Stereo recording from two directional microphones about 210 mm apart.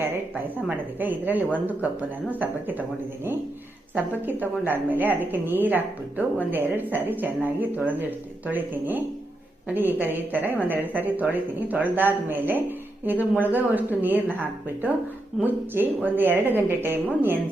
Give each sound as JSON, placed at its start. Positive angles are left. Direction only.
{"t": 0.9, "sound": "a woman's voice", "side_deg": -10}
{"t": 3.9, "sound": "a woman's voice", "side_deg": -10}